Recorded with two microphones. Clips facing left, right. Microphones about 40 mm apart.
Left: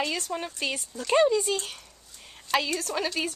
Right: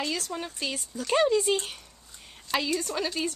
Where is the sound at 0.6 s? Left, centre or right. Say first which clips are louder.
Left 2 dB; left.